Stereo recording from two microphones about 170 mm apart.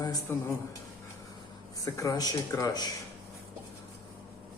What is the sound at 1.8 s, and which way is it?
Speech, 20° left (ahead or behind).